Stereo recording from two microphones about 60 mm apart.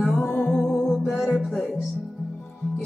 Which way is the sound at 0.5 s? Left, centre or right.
Centre.